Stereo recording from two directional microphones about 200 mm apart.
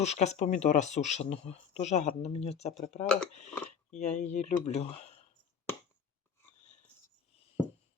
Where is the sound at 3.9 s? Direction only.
35° left (ahead or behind).